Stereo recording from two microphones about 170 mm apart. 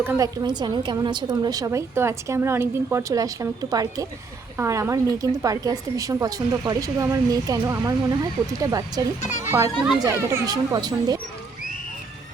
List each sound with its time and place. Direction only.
0.0 s speech: 15° right (ahead or behind)
0.4 s a woman's voice: 25° right (ahead or behind)